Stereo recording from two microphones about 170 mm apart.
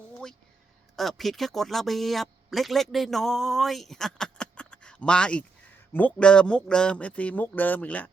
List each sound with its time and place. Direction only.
0.9 s speech: centre (ahead or behind)